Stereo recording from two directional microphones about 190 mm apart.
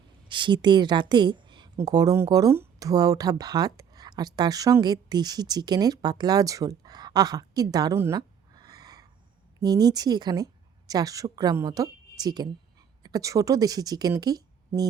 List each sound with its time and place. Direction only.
0.3 s a woman's voice: 25° right (ahead or behind)